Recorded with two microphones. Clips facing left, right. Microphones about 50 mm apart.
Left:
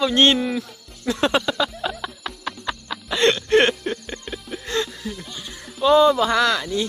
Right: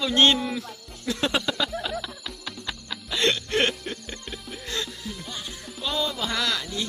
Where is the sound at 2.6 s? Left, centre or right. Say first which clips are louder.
Left 6 dB; left.